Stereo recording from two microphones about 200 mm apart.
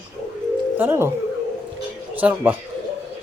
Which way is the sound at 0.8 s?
10° right (ahead or behind).